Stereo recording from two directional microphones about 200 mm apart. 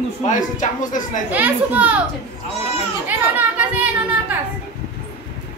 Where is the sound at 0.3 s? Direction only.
40° left (ahead or behind).